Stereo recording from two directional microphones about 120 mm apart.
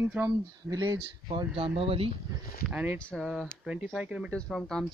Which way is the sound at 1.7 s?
50° right (ahead or behind).